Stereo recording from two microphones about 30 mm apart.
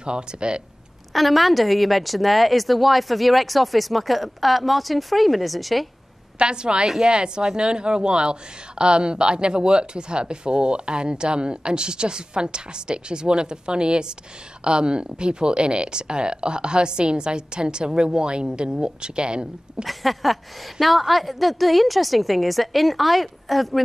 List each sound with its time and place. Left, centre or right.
0.0 s a woman's voice: right
1.1 s speech: centre
6.3 s a woman's voice: right
19.8 s speech: centre